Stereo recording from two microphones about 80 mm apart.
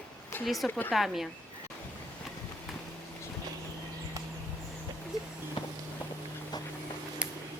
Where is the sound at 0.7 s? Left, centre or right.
Left.